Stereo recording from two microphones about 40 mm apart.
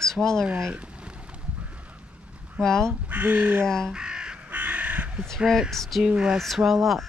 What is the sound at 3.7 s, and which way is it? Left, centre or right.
Speech, centre.